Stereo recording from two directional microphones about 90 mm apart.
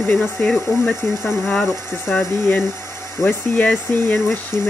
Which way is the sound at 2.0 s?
20° left (ahead or behind).